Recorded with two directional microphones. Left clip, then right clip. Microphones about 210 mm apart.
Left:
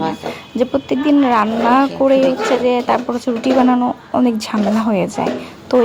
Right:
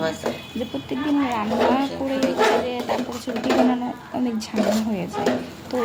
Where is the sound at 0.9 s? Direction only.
25° left (ahead or behind).